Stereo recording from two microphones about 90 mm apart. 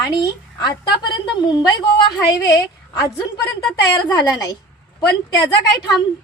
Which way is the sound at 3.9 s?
40° left (ahead or behind).